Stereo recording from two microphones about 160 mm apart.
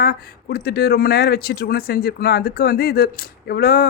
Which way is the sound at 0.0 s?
75° left (ahead or behind).